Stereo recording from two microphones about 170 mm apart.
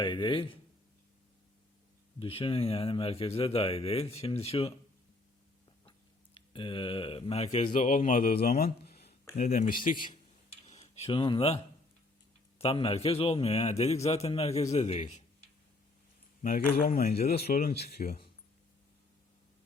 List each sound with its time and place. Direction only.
0.0 s speech: 30° left (ahead or behind)
2.1 s speech: 35° left (ahead or behind)
6.3 s speech: 30° left (ahead or behind)
7.7 s speech: 50° left (ahead or behind)
10.7 s speech: 40° left (ahead or behind)
16.4 s speech: 55° left (ahead or behind)